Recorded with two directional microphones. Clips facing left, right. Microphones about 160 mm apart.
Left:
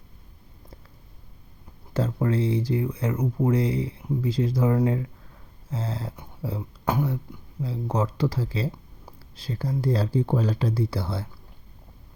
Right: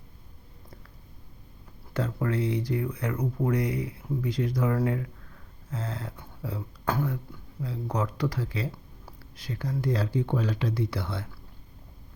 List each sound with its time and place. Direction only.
1.9 s speech: 30° left (ahead or behind)
6.8 s speech: 15° left (ahead or behind)
7.6 s speech: 30° left (ahead or behind)